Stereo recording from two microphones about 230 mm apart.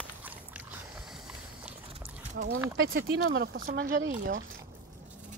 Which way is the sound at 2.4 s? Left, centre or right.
Right.